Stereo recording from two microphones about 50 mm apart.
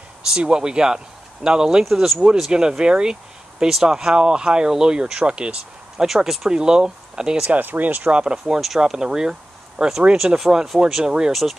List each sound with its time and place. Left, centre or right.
0.3 s speech: centre
2.0 s speech: centre
2.8 s speech: centre
5.9 s speech: centre
7.5 s speech: right
8.1 s speech: centre
8.5 s speech: centre